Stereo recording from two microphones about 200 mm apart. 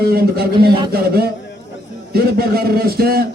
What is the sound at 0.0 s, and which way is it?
A man's voice, 50° right (ahead or behind).